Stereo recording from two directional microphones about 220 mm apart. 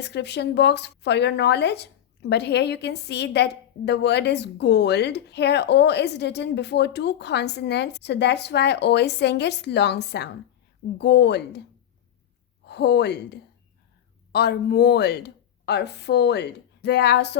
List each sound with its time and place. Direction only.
0.0 s a woman's voice: 50° left (ahead or behind)
12.6 s a woman's voice: 50° left (ahead or behind)